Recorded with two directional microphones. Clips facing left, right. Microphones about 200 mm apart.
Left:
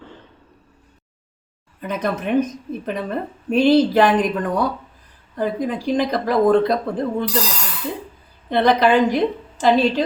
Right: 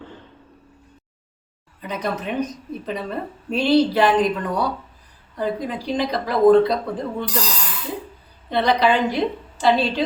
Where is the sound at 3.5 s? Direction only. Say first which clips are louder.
Left 3 dB; 50° left (ahead or behind).